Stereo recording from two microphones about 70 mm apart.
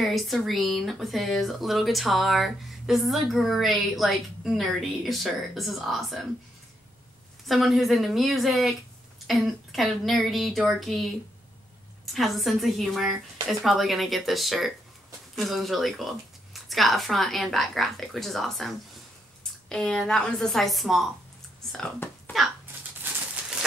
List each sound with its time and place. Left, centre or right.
0.0 s a woman's voice: centre
7.4 s a woman's voice: centre
12.1 s a woman's voice: centre
19.7 s a woman's voice: centre
23.0 s a sound: right